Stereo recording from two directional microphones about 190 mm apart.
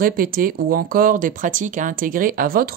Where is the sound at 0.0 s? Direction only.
50° right (ahead or behind).